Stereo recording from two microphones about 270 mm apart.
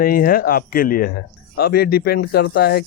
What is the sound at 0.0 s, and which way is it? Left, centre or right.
Speech, left.